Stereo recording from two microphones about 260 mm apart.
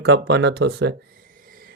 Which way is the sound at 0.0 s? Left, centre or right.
Right.